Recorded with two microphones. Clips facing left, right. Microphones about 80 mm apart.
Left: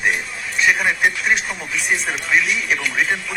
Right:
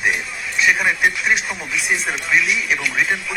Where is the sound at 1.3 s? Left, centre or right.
Left.